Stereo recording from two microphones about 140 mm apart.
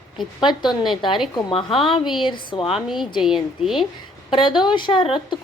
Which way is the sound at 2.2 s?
35° left (ahead or behind).